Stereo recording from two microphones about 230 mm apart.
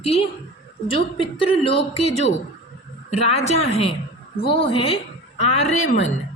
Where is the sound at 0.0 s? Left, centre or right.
Left.